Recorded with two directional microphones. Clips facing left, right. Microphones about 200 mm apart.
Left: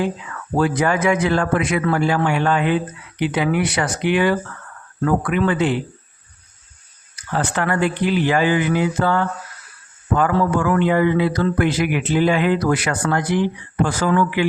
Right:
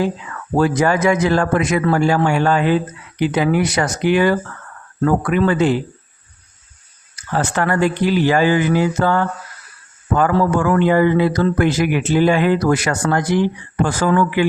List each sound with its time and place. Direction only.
0.5 s a man's voice: 40° right (ahead or behind)
7.3 s a man's voice: 40° right (ahead or behind)